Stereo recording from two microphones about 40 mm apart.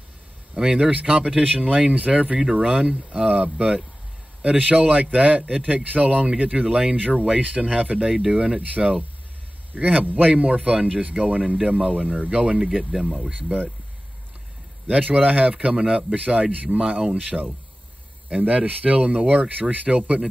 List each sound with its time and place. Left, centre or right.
0.7 s speech: right
8.1 s speech: centre
8.4 s speech: right
13.3 s speech: right
14.9 s speech: right
19.7 s speech: right